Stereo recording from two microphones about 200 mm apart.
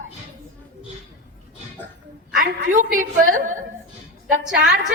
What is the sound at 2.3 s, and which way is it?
A woman's voice, 45° right (ahead or behind).